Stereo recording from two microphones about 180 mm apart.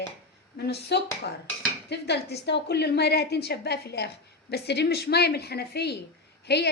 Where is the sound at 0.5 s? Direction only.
65° left (ahead or behind).